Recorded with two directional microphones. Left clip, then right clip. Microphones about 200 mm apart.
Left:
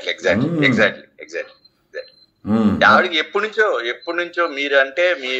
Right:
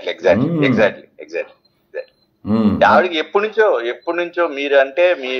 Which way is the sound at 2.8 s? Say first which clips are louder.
Right 1 dB; 15° left (ahead or behind).